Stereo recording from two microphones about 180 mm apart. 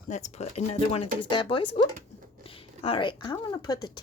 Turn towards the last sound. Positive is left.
turn(degrees=20)  # may be behind; listen again after turning